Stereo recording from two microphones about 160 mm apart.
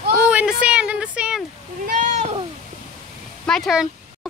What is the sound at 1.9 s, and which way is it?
Cat, 50° right (ahead or behind).